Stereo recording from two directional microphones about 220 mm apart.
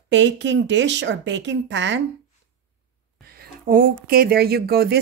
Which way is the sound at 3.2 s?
40° right (ahead or behind).